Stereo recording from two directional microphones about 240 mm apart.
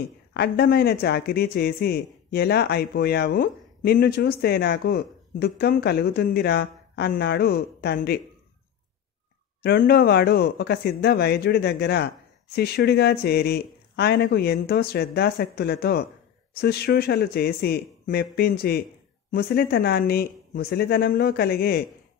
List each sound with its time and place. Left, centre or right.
0.3 s speech: left
9.6 s speech: left